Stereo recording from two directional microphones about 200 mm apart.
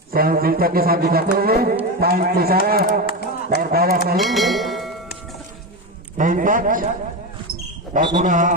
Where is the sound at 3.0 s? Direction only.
50° left (ahead or behind).